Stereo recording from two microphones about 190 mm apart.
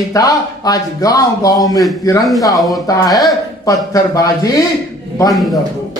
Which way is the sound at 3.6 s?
20° left (ahead or behind).